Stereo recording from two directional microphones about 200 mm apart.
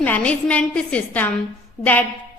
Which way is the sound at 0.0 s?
5° left (ahead or behind).